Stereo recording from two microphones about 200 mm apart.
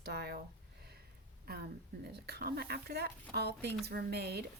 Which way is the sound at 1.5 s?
50° right (ahead or behind).